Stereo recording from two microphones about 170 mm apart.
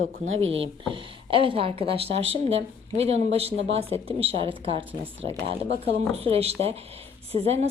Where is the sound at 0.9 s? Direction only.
30° right (ahead or behind).